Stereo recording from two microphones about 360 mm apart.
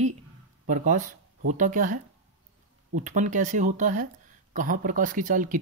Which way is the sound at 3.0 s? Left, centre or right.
Right.